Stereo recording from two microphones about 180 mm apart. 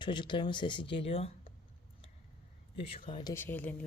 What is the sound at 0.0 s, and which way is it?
Speech, 25° left (ahead or behind).